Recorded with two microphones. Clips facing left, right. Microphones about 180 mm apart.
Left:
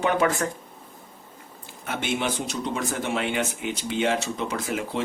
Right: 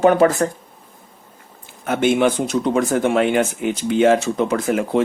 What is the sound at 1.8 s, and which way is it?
Speech, 50° right (ahead or behind).